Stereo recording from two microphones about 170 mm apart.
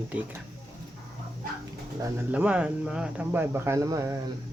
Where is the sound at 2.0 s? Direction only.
10° right (ahead or behind).